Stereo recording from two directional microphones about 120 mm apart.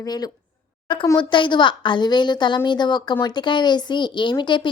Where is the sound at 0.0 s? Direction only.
30° left (ahead or behind).